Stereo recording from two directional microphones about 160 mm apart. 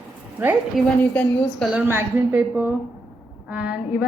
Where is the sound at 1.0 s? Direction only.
10° left (ahead or behind).